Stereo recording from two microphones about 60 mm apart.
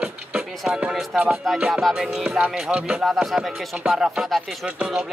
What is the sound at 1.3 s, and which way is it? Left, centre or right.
Speech, centre.